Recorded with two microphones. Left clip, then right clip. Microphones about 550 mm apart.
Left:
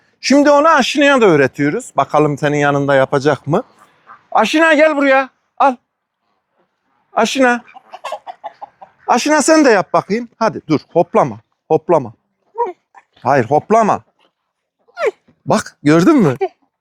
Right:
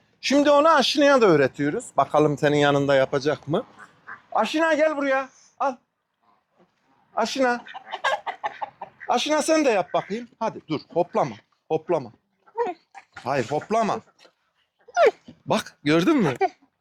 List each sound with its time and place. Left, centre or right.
0.2 s a man's voice: left
7.1 s speech: left
7.9 s chicken: right
9.0 s speech: left
12.5 s dog: centre
13.2 s speech: left
15.4 s speech: left